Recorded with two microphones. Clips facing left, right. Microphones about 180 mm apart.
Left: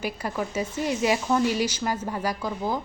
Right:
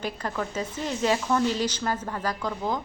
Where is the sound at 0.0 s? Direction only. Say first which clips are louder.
Left 1 dB; 10° left (ahead or behind).